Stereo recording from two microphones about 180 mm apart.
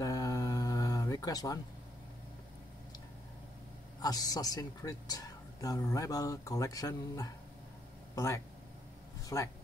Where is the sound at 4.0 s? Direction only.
20° left (ahead or behind).